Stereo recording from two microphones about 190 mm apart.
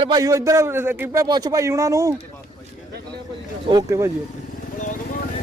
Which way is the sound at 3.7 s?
20° right (ahead or behind).